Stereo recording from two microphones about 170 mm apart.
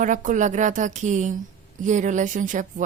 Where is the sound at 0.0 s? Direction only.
50° right (ahead or behind).